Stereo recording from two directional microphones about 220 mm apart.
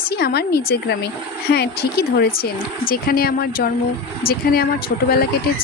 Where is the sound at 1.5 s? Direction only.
45° left (ahead or behind).